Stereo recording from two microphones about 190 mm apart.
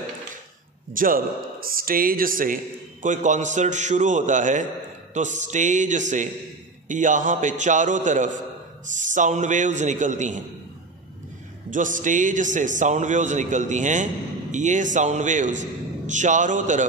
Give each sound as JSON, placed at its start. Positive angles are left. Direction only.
{"t": 0.9, "sound": "a man's voice", "side_deg": -50}
{"t": 11.7, "sound": "a man's voice", "side_deg": -40}